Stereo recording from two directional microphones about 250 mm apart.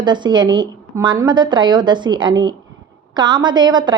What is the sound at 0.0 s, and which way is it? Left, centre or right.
A woman's voice, centre.